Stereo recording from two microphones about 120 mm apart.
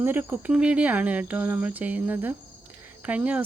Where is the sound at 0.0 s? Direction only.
15° right (ahead or behind).